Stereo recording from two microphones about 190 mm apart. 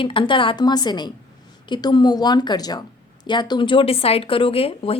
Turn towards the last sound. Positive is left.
turn(degrees=30)  # may be behind; listen again after turning